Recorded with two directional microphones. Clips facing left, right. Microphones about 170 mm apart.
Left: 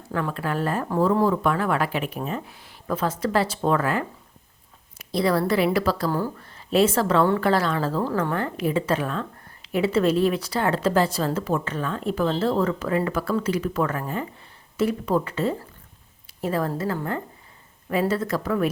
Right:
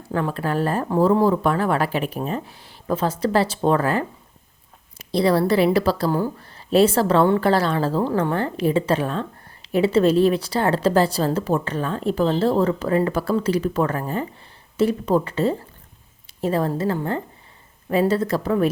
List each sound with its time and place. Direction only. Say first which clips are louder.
0.1 s a woman's voice: right 3 dB; 30° right (ahead or behind)
6.1 s speech: right 3 dB; 15° right (ahead or behind)
6.4 s a woman's voice: right 3 dB; 30° right (ahead or behind)